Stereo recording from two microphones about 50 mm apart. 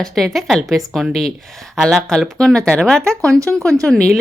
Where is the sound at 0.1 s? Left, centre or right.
Centre.